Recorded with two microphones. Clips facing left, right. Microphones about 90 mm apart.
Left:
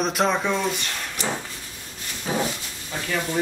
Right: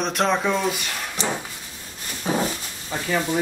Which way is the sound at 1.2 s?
25° right (ahead or behind).